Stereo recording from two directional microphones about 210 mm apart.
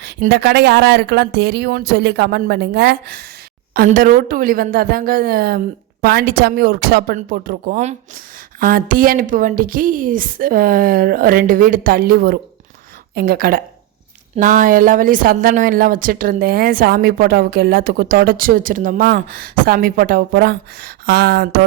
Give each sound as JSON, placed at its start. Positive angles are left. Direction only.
{"t": 0.0, "sound": "a woman's voice", "side_deg": -50}